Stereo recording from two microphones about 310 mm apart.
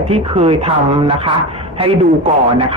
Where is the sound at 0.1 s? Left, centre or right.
Centre.